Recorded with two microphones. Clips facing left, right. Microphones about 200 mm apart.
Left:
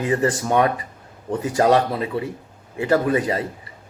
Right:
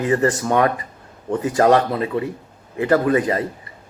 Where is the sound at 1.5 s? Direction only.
20° left (ahead or behind).